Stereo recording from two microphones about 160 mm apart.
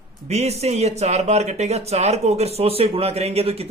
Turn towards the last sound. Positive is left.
turn(degrees=-40)  # may be behind; listen again after turning